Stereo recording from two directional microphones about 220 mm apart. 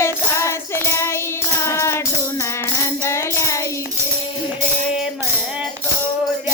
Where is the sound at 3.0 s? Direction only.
10° left (ahead or behind).